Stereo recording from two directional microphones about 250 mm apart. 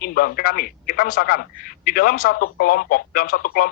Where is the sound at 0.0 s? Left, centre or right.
Left.